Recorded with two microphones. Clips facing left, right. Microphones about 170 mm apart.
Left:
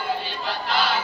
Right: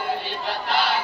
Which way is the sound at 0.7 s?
60° right (ahead or behind).